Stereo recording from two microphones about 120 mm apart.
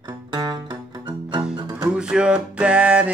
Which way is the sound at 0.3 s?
40° right (ahead or behind).